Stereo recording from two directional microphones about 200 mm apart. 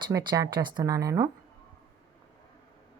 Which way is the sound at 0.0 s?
20° right (ahead or behind).